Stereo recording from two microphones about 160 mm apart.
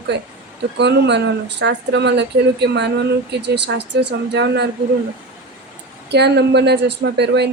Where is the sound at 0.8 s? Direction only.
90° right.